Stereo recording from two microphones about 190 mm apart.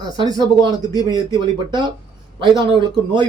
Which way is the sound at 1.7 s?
25° right (ahead or behind).